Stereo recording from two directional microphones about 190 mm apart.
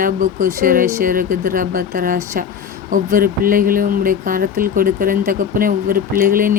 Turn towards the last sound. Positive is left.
turn(degrees=-45)  # may be behind; listen again after turning